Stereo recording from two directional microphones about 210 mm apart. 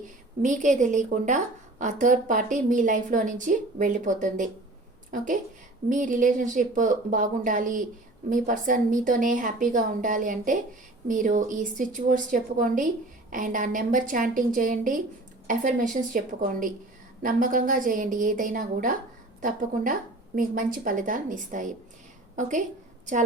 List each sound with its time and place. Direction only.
0.4 s a woman's voice: 35° right (ahead or behind)